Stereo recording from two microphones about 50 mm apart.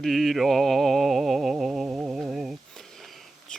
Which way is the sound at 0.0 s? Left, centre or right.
Centre.